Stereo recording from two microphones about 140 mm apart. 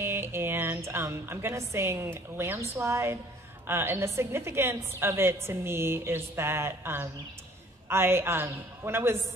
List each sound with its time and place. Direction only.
0.0 s a woman's voice: 15° right (ahead or behind)